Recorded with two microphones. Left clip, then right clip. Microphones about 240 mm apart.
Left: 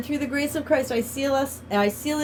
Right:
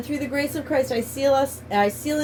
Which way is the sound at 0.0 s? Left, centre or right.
Left.